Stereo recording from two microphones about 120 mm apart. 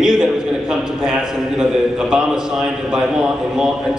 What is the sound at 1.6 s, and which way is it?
A man's voice, 5° right (ahead or behind).